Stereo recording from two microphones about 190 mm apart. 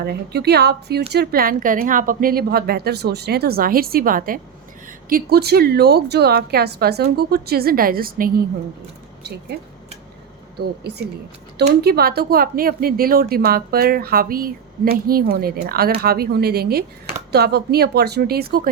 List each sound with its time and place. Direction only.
0.0 s a woman's voice: 55° right (ahead or behind)
9.5 s a woman's voice: 60° right (ahead or behind)